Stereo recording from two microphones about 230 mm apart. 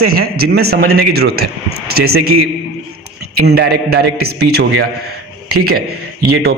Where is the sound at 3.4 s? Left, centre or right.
Right.